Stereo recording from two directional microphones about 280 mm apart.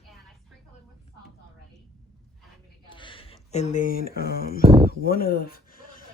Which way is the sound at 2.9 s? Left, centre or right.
Centre.